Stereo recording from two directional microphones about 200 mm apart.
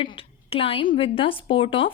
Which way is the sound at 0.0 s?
25° left (ahead or behind).